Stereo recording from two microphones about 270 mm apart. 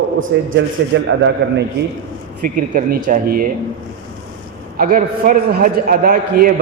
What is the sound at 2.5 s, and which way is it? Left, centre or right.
Speech, right.